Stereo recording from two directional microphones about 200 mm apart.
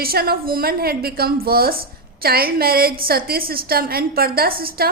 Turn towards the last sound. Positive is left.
turn(degrees=-50)  # may be behind; listen again after turning